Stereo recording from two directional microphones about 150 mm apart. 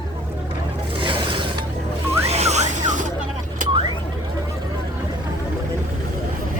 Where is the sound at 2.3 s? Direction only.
45° right (ahead or behind).